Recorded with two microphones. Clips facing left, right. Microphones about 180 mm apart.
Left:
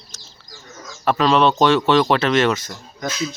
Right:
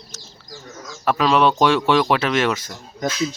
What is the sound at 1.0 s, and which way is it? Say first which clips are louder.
Speech: left 1 dB; 5° right (ahead or behind).